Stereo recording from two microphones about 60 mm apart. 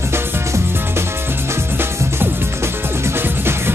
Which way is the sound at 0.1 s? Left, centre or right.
Right.